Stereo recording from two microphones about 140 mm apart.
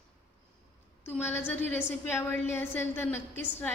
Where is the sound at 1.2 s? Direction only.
15° left (ahead or behind).